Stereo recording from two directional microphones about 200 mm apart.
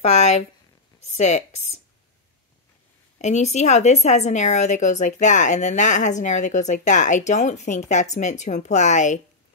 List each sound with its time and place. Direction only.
0.0 s a woman's voice: 35° left (ahead or behind)
3.2 s a woman's voice: 35° left (ahead or behind)